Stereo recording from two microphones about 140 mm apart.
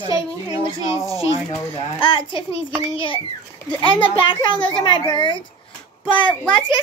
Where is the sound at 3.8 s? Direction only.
35° left (ahead or behind).